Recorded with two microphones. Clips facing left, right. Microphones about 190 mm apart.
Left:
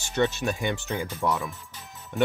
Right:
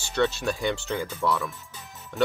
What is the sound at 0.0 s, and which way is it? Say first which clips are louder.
Speech: even; 15° left (ahead or behind).